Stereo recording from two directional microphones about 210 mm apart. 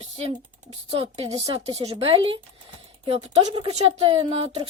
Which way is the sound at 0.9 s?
25° right (ahead or behind).